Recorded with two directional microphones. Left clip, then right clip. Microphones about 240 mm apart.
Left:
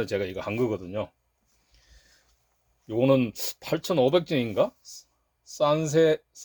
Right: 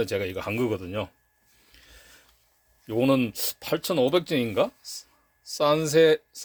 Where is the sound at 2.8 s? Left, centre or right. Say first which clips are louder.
Left 1 dB; right.